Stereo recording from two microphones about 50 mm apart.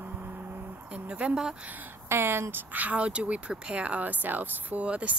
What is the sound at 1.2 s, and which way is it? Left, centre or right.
Speech, centre.